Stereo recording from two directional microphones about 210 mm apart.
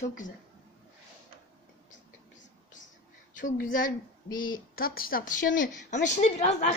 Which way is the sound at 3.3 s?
40° left (ahead or behind).